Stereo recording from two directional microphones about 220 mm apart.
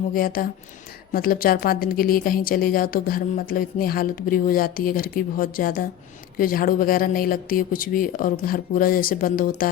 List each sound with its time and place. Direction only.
0.1 s speech: 40° left (ahead or behind)